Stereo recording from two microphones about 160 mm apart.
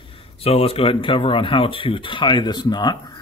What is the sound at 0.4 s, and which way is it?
Speech, 40° left (ahead or behind).